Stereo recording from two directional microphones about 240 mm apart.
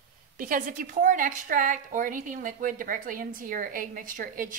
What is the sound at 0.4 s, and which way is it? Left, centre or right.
A woman's voice, right.